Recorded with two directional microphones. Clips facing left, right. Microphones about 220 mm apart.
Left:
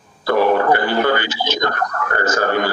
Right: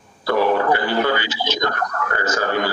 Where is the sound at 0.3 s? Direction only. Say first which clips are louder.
Left 3 dB; 50° left (ahead or behind).